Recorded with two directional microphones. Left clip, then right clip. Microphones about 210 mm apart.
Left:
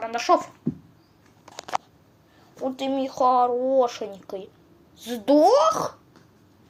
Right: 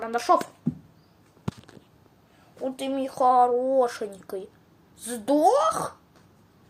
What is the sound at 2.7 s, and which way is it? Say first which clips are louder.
Speech: left 3 dB; 10° right (ahead or behind).